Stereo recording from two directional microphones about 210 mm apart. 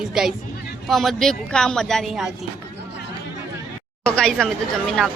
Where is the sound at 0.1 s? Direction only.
Centre (ahead or behind).